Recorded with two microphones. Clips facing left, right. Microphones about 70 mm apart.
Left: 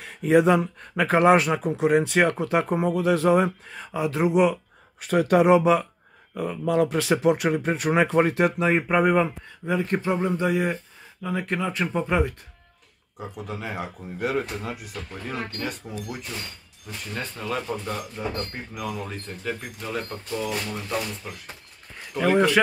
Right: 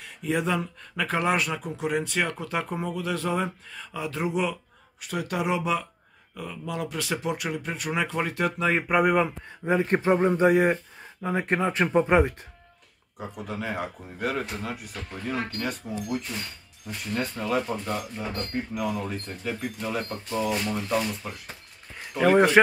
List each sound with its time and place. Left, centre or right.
0.0 s a sound: left
0.9 s speech: left
5.1 s speech: left
7.1 s speech: left
8.5 s speech: centre
8.8 s speech: centre
9.7 s speech: right
13.2 s speech: centre
22.1 s speech: centre